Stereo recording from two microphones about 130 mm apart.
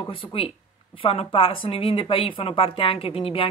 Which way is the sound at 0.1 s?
45° left (ahead or behind).